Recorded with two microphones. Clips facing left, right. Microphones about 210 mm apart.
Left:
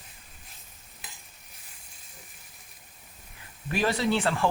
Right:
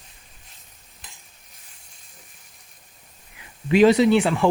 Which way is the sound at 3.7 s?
20° right (ahead or behind).